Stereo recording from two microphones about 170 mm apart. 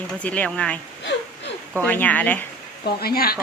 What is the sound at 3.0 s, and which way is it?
Speech, 65° left (ahead or behind).